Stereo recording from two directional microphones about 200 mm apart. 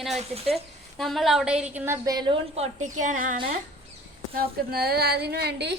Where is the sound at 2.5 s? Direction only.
35° right (ahead or behind); by 5.8 s 55° right (ahead or behind).